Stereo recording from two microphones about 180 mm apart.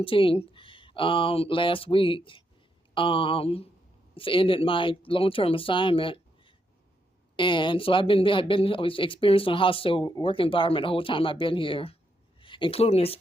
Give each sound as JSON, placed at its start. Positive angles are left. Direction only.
{"t": 0.0, "sound": "speech", "side_deg": 30}